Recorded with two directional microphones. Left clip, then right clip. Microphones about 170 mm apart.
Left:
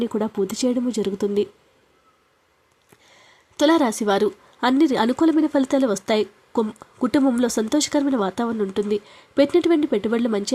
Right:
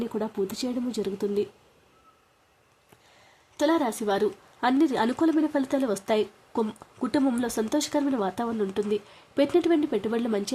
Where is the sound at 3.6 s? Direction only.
30° left (ahead or behind).